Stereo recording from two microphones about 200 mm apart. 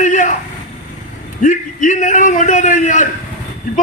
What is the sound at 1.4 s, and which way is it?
A man's voice, 40° left (ahead or behind).